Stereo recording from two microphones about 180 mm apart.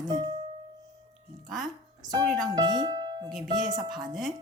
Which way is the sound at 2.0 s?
25° right (ahead or behind).